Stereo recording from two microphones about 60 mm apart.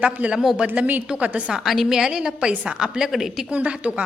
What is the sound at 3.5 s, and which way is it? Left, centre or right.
Speech, centre.